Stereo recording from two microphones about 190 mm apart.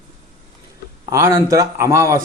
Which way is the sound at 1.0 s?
15° right (ahead or behind).